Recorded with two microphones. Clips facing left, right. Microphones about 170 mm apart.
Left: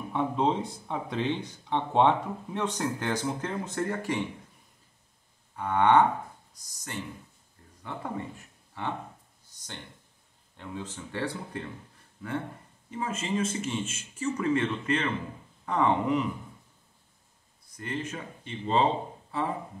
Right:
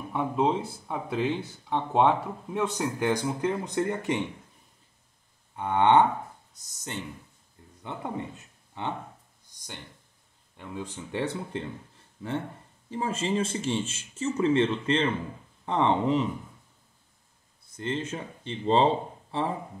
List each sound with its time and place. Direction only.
0.1 s speech: 5° right (ahead or behind); by 4.2 s 20° right (ahead or behind)
5.6 s speech: 20° right (ahead or behind)
7.8 s speech: 20° right (ahead or behind)
10.6 s speech: 15° right (ahead or behind)
12.9 s speech: 30° right (ahead or behind)
17.7 s speech: 25° right (ahead or behind)